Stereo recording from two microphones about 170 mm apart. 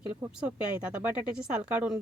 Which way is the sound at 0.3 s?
5° right (ahead or behind).